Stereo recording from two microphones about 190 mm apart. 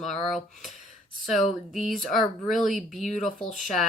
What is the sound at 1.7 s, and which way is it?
Speech, centre (ahead or behind).